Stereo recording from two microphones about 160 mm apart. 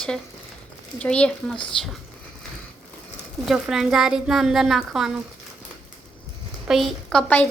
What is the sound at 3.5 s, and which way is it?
A woman's voice, centre (ahead or behind).